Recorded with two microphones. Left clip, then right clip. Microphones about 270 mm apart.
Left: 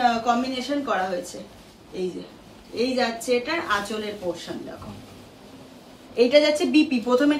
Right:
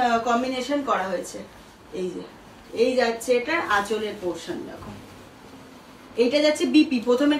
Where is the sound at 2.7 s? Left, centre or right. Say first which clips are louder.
Right 3 dB; centre.